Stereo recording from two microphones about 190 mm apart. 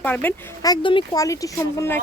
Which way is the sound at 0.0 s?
10° left (ahead or behind).